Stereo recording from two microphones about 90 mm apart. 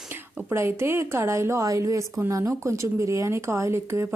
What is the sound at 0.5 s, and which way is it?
A woman's voice, 30° right (ahead or behind).